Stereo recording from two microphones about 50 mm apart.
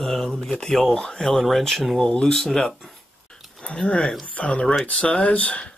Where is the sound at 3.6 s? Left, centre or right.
Left.